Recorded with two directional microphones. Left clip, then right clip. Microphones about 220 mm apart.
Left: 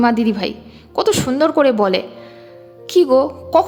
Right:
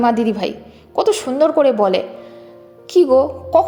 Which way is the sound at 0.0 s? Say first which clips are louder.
Even; 15° left (ahead or behind).